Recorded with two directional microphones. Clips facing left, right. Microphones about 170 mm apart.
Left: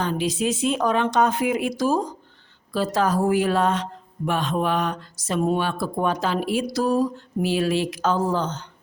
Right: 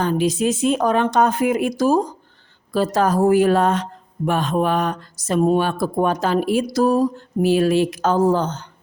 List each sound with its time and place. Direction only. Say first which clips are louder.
0.0 s speech: right 5 dB; 45° right (ahead or behind)